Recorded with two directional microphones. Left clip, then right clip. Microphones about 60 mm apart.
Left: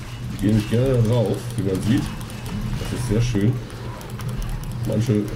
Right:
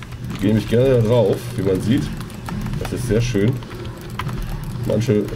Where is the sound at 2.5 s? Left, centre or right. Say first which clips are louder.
Right 4 dB; centre.